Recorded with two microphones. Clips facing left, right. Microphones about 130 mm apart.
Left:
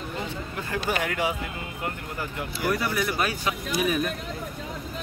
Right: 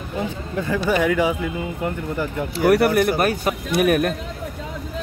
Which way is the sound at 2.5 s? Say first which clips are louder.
Right 11 dB; 75° right (ahead or behind).